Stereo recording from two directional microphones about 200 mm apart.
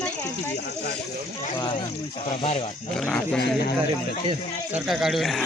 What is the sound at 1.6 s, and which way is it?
Speech, 25° left (ahead or behind).